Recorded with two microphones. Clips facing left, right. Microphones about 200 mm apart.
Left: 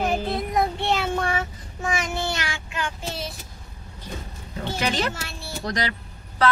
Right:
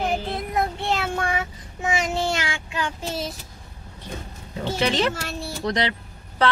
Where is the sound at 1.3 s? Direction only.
20° right (ahead or behind).